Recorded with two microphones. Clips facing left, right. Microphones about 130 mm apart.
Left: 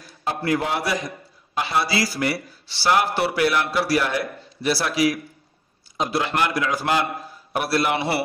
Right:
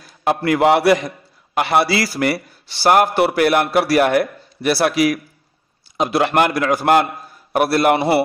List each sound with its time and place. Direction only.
0.2 s a man's voice: 75° right (ahead or behind); by 8.2 s 50° right (ahead or behind)